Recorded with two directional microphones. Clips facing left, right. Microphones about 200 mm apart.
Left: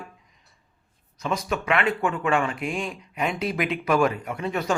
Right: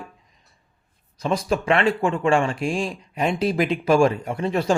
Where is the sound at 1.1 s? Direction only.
30° right (ahead or behind).